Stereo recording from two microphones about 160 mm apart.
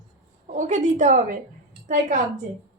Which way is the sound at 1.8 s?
55° right (ahead or behind).